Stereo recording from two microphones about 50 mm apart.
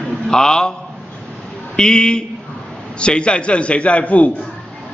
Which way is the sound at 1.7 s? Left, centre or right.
Centre.